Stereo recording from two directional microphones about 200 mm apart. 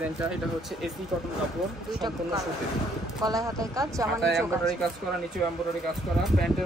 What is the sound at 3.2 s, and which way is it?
Speech, 15° right (ahead or behind).